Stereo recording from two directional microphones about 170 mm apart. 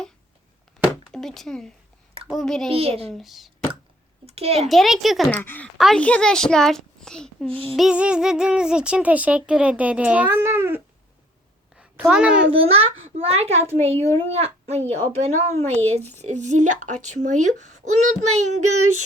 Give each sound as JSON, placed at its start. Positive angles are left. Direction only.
{"t": 0.8, "sound": "a sound", "side_deg": 0}
{"t": 1.1, "sound": "a child's voice", "side_deg": 0}
{"t": 2.6, "sound": "a child's voice", "side_deg": -35}
{"t": 3.1, "sound": "a child's voice", "side_deg": 0}
{"t": 4.3, "sound": "a child's voice", "side_deg": -35}
{"t": 4.7, "sound": "a child's voice", "side_deg": 0}
{"t": 5.3, "sound": "a child's voice", "side_deg": 10}
{"t": 7.8, "sound": "speech", "side_deg": -5}
{"t": 11.8, "sound": "a sound", "side_deg": -5}
{"t": 12.5, "sound": "a child's voice", "side_deg": -35}